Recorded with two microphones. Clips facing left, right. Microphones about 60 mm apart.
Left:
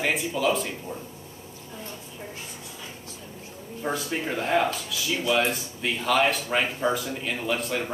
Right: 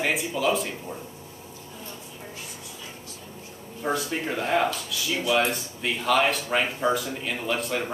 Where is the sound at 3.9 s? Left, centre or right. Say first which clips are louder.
Right 1 dB; centre.